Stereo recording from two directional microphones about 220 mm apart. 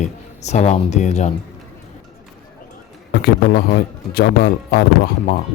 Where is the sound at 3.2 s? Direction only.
40° left (ahead or behind).